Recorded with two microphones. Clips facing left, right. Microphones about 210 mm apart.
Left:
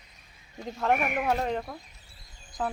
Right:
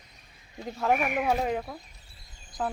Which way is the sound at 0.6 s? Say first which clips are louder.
Even; 5° right (ahead or behind).